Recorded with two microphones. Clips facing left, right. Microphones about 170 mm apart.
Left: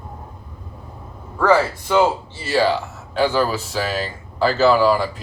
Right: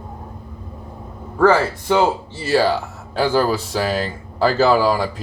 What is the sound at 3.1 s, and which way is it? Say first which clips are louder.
Speech: right 1 dB; 40° right (ahead or behind).